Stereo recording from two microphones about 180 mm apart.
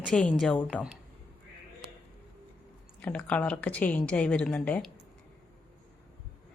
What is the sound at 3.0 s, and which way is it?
A woman's voice, 5° left (ahead or behind).